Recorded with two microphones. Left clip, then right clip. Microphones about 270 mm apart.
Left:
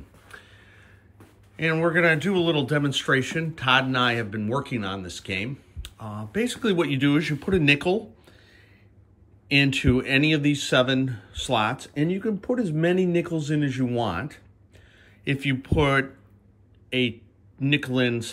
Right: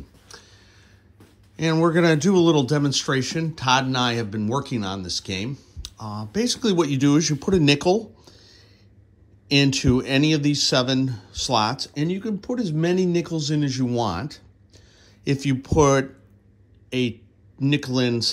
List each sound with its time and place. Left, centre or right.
1.6 s a man's voice: centre
12.0 s a man's voice: centre
17.6 s a man's voice: centre